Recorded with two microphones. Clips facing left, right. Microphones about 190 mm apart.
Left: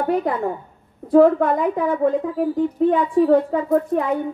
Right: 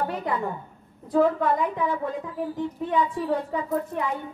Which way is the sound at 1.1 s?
55° left (ahead or behind).